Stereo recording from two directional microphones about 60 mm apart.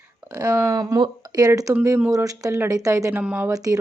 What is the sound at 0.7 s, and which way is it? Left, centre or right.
A woman's voice, right.